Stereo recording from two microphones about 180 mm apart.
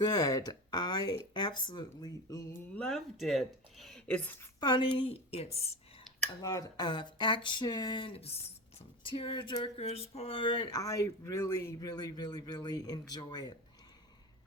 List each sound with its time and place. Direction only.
0.0 s speech: 20° left (ahead or behind)
2.7 s speech: 5° left (ahead or behind)
4.6 s speech: 25° left (ahead or behind)
6.1 s a sound: centre (ahead or behind)
6.4 s speech: 20° left (ahead or behind)